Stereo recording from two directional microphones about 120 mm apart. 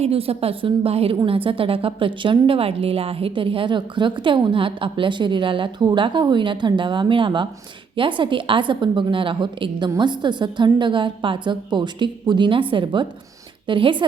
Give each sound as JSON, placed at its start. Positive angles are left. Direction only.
{"t": 0.0, "sound": "a woman's voice", "side_deg": -55}